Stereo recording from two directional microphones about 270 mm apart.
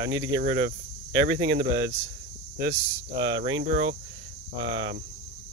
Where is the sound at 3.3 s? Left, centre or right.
Right.